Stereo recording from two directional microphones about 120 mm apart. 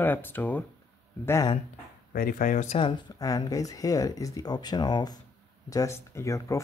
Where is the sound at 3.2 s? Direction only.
30° left (ahead or behind).